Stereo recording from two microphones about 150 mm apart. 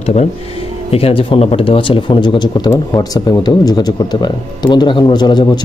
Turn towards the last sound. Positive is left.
turn(degrees=30)  # may be behind; listen again after turning